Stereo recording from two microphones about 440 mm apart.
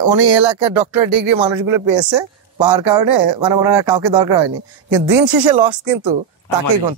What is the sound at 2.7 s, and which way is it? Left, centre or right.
Speech, right.